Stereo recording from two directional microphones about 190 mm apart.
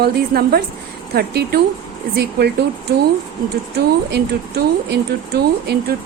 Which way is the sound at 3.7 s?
60° right (ahead or behind).